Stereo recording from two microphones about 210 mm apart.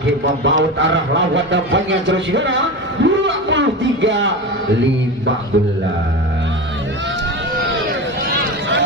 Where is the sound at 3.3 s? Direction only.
60° right (ahead or behind).